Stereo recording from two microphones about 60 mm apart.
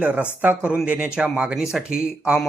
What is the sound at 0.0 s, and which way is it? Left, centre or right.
Speech, right.